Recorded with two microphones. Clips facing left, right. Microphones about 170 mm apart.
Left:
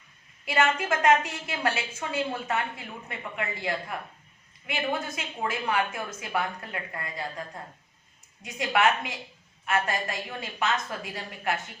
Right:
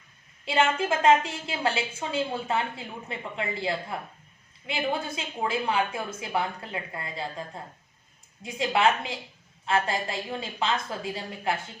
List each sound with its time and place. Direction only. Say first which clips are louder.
0.4 s a woman's voice: right 1 dB; 25° right (ahead or behind)